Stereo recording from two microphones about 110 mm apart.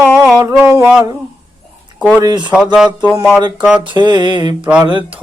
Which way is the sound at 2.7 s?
10° right (ahead or behind).